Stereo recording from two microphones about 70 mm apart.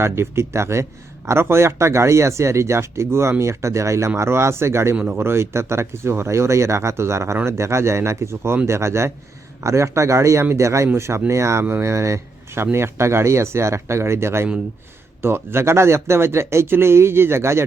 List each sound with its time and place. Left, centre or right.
0.0 s speech: right